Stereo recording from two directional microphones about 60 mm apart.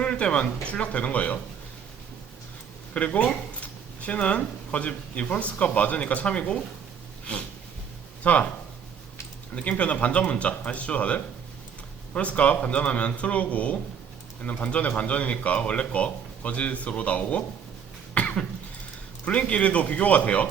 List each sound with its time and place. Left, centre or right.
0.0 s speech: centre
2.9 s speech: left
9.6 s speech: left
18.1 s cough: left
19.2 s speech: left